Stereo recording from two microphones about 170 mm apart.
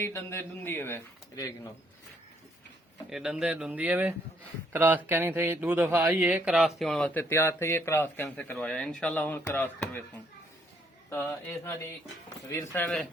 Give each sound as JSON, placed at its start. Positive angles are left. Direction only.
{"t": 0.0, "sound": "speech", "side_deg": 15}
{"t": 3.1, "sound": "speech", "side_deg": -5}
{"t": 11.1, "sound": "speech", "side_deg": 10}